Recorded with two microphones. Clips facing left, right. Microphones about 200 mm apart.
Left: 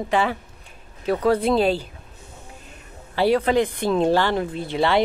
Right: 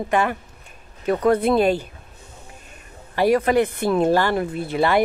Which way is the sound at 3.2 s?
10° right (ahead or behind).